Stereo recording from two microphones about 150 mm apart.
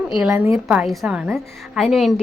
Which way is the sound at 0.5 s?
Centre (ahead or behind).